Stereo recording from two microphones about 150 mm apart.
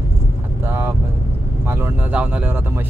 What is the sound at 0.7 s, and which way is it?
Speech, 15° right (ahead or behind).